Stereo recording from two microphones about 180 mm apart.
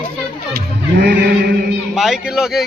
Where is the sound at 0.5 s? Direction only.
70° right (ahead or behind).